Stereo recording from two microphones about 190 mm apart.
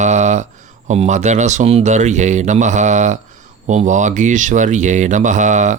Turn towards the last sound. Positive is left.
turn(degrees=-40)  # may be behind; listen again after turning